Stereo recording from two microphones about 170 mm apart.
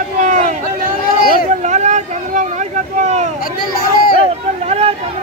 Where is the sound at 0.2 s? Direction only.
45° right (ahead or behind).